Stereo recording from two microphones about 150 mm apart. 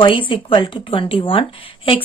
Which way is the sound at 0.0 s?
35° left (ahead or behind).